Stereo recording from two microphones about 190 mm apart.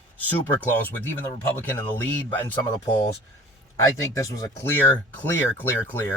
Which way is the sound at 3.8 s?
15° left (ahead or behind).